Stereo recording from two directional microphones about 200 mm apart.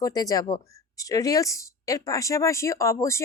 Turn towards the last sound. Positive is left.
turn(degrees=15)  # may be behind; listen again after turning